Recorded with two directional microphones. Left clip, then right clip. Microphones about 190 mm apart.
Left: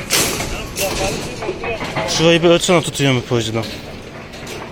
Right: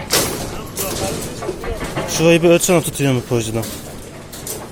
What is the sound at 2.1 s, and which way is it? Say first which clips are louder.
Speech: even; 15° right (ahead or behind).